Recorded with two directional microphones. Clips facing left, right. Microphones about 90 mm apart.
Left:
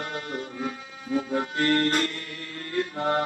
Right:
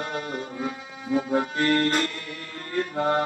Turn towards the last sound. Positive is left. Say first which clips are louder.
# right 2 dB
turn(degrees=-25)  # may be behind; listen again after turning